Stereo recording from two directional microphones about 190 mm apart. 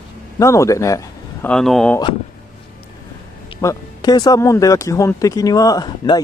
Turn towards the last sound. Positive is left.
turn(degrees=20)  # may be behind; listen again after turning